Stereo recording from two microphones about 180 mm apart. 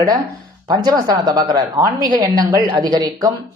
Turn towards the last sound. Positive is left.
turn(degrees=-20)  # may be behind; listen again after turning